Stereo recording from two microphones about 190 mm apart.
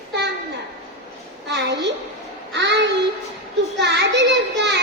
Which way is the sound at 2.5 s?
65° right (ahead or behind).